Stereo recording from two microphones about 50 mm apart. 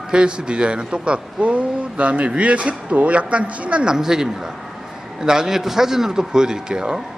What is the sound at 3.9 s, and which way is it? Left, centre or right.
A man's voice, centre.